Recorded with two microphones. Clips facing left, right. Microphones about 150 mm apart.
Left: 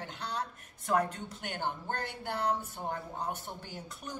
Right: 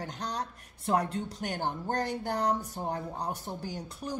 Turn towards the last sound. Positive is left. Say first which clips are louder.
# right 6 dB
turn(degrees=-35)  # may be behind; listen again after turning